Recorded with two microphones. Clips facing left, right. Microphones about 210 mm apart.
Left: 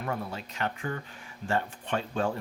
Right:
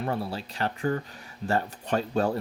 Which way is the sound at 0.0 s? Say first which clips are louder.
Right 4 dB; 30° right (ahead or behind).